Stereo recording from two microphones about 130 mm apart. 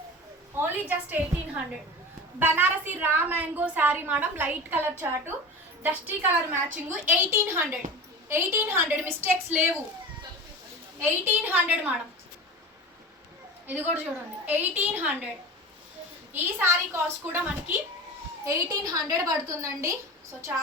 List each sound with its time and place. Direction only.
0.5 s a woman's voice: 15° right (ahead or behind)
11.0 s a woman's voice: 15° right (ahead or behind)
13.7 s a woman's voice: 15° right (ahead or behind)
16.3 s a woman's voice: 15° right (ahead or behind)